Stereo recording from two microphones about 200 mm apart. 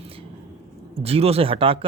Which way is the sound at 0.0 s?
30° right (ahead or behind).